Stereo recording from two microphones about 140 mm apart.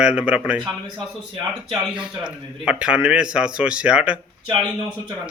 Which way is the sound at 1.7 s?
5° right (ahead or behind).